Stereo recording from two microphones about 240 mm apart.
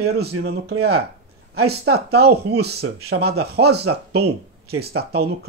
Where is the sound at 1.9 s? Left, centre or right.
Right.